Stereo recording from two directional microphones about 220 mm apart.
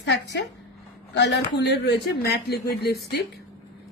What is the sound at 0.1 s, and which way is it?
A woman's voice, 50° left (ahead or behind).